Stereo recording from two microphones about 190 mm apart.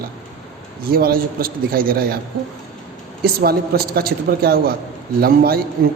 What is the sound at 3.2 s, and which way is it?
A man's voice, 55° right (ahead or behind).